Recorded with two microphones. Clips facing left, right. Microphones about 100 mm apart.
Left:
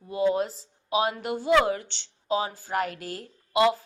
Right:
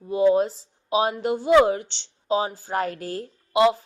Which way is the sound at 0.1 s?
25° right (ahead or behind).